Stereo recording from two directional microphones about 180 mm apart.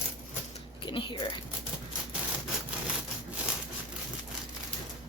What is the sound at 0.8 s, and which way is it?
Speech, 25° left (ahead or behind).